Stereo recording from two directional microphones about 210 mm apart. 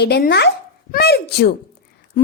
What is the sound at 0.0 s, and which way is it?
A child's voice, 50° left (ahead or behind).